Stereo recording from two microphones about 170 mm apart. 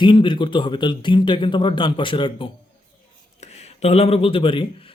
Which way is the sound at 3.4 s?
40° left (ahead or behind).